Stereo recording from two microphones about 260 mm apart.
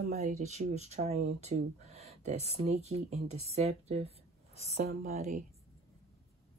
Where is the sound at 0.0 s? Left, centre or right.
Right.